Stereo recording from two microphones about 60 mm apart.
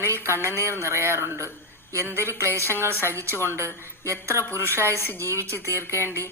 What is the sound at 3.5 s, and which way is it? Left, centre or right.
Speech, right.